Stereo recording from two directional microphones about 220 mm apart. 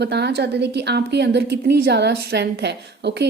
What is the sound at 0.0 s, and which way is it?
A woman's voice, 50° right (ahead or behind).